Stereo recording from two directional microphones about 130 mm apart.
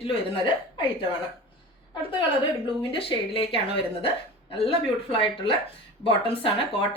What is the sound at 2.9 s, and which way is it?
Speech, 45° left (ahead or behind).